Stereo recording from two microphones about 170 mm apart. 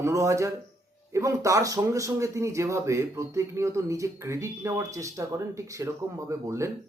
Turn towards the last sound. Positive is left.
turn(degrees=-15)  # may be behind; listen again after turning